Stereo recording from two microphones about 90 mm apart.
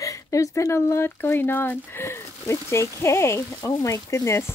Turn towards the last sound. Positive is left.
turn(degrees=30)  # may be behind; listen again after turning